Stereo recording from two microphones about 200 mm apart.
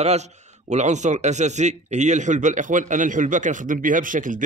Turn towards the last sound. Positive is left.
turn(degrees=-40)  # may be behind; listen again after turning